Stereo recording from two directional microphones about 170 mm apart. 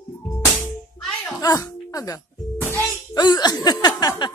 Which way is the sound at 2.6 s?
10° left (ahead or behind).